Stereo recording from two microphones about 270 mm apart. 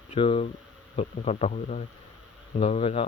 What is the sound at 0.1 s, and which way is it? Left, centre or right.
Speech, left.